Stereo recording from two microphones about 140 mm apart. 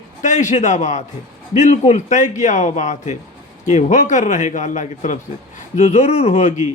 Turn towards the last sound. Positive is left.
turn(degrees=55)  # may be behind; listen again after turning